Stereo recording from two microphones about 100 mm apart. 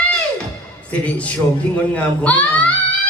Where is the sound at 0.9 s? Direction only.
15° left (ahead or behind).